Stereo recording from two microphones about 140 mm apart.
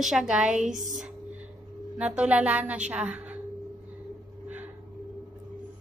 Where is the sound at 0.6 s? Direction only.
65° right (ahead or behind).